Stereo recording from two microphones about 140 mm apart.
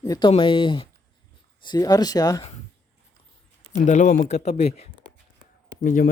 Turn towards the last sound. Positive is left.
turn(degrees=70)  # may be behind; listen again after turning